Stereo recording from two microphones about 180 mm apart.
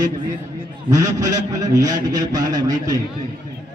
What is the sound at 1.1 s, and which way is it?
A man's voice, 20° right (ahead or behind).